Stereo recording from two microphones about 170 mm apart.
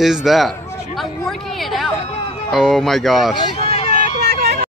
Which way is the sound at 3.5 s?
35° left (ahead or behind).